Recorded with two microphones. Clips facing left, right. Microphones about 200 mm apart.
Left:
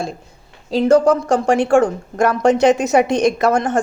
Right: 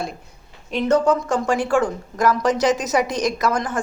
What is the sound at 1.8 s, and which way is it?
Speech, 60° left (ahead or behind).